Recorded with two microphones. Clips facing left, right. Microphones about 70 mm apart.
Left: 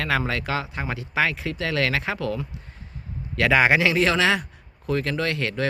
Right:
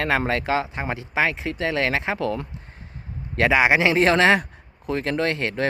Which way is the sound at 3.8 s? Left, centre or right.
Right.